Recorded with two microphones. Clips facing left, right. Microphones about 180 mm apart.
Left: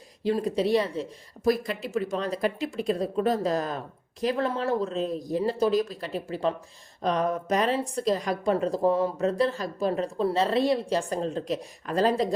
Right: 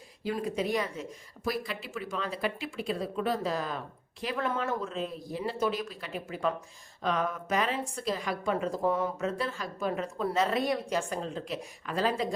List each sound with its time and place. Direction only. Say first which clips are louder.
0.3 s speech: left 6 dB; 35° left (ahead or behind)